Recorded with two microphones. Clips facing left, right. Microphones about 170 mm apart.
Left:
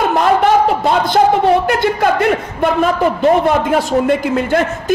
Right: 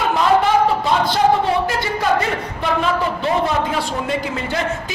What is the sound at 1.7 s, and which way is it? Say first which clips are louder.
A man's voice: left 5 dB; 60° left (ahead or behind).